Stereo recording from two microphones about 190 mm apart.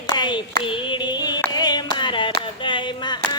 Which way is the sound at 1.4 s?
20° left (ahead or behind).